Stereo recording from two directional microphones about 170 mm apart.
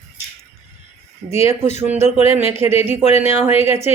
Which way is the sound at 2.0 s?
35° left (ahead or behind).